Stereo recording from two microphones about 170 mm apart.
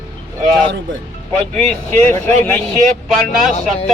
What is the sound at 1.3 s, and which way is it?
Speech, 5° left (ahead or behind).